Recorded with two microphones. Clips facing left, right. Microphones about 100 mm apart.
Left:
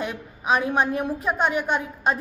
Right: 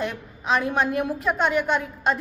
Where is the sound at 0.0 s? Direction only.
10° left (ahead or behind).